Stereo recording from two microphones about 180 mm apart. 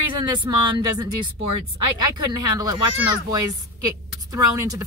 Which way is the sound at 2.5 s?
20° right (ahead or behind).